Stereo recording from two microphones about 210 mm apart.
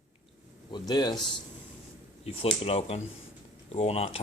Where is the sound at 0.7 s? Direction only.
20° left (ahead or behind).